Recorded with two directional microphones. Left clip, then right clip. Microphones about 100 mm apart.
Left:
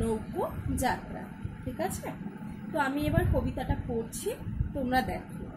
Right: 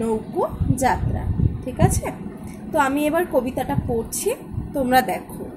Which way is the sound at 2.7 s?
45° right (ahead or behind).